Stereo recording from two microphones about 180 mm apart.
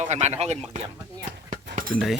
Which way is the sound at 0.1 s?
40° right (ahead or behind).